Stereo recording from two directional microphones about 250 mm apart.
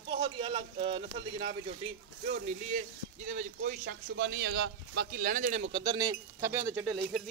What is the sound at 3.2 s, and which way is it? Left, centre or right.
Speech, right.